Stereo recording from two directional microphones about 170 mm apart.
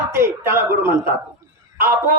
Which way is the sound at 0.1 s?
15° right (ahead or behind).